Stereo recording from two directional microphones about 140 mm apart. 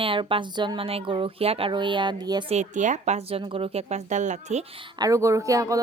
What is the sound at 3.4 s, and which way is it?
Speech, 40° right (ahead or behind).